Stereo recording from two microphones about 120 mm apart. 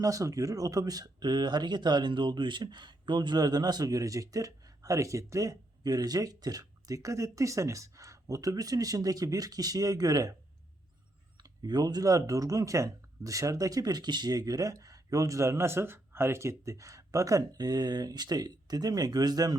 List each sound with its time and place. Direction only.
0.0 s speech: 25° right (ahead or behind)
11.3 s speech: 35° right (ahead or behind)